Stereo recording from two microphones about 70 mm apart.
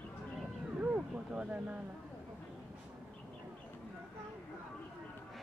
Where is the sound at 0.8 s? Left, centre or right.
Centre.